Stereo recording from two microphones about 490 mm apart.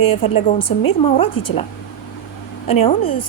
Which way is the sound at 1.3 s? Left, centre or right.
Left.